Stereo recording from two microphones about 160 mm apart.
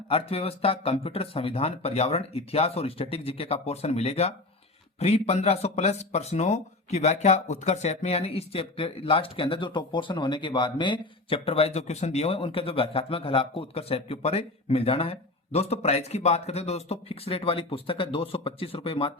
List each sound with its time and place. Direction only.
0.1 s speech: 35° left (ahead or behind)